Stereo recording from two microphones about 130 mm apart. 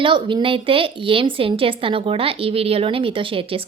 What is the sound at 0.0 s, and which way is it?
A woman's voice, 40° right (ahead or behind).